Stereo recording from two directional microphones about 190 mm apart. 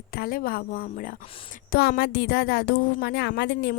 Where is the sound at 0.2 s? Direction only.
50° left (ahead or behind).